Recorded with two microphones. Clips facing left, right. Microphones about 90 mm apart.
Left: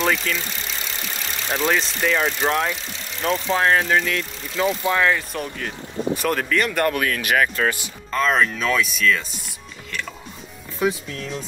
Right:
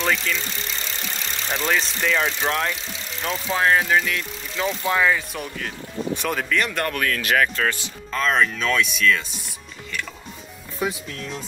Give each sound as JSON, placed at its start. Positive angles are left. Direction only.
{"t": 0.0, "sound": "speech", "side_deg": 0}
{"t": 7.1, "sound": "speech", "side_deg": 15}
{"t": 8.1, "sound": "speech", "side_deg": 0}